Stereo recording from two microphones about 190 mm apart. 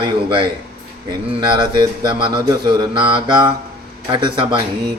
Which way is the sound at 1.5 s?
25° right (ahead or behind).